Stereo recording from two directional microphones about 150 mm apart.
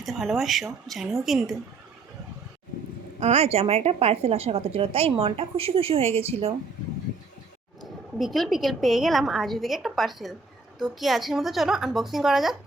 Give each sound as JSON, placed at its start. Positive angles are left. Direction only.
{"t": 0.0, "sound": "a woman's voice", "side_deg": 0}
{"t": 3.2, "sound": "a woman's voice", "side_deg": -45}
{"t": 7.8, "sound": "a woman's voice", "side_deg": 0}